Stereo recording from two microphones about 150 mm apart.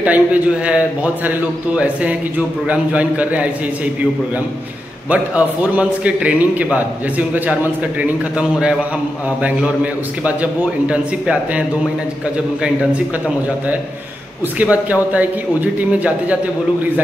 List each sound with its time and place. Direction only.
0.0 s a man's voice: 10° right (ahead or behind)
5.1 s a man's voice: 10° right (ahead or behind)
10.2 s a man's voice: 10° right (ahead or behind)
14.6 s a man's voice: 10° right (ahead or behind)